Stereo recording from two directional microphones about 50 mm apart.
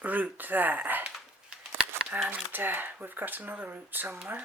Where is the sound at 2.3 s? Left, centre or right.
Right.